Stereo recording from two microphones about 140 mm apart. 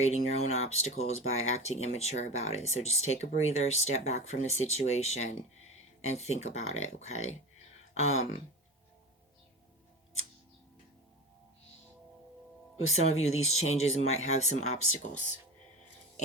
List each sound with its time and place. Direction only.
0.0 s speech: 55° left (ahead or behind)
12.9 s speech: 50° left (ahead or behind)